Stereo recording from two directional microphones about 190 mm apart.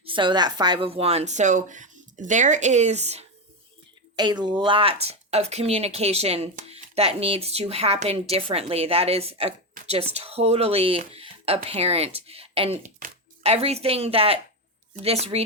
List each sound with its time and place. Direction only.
0.0 s speech: 25° right (ahead or behind)
4.1 s speech: 20° right (ahead or behind)